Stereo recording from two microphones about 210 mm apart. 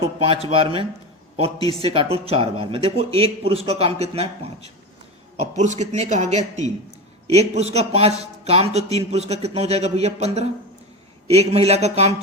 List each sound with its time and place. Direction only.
0.4 s a man's voice: 25° right (ahead or behind)